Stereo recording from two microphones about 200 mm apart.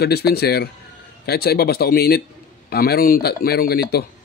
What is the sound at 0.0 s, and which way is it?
A man's voice, 50° left (ahead or behind).